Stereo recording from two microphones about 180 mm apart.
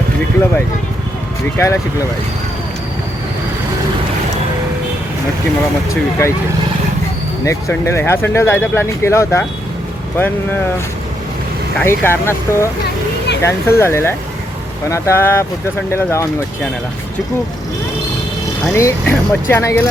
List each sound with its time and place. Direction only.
1.5 s speech: 15° left (ahead or behind)
5.9 s speech: 15° left (ahead or behind)
7.4 s speech: 15° left (ahead or behind)
11.8 s speech: 15° left (ahead or behind)
12.8 s a sound: 70° left (ahead or behind)
13.4 s speech: 15° left (ahead or behind)
18.6 s speech: 15° left (ahead or behind)